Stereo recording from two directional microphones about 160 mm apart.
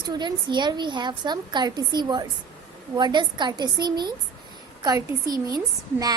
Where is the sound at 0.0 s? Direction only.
25° right (ahead or behind).